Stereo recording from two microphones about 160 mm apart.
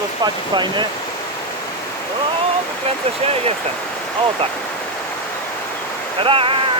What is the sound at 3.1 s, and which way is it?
Speech, 40° right (ahead or behind).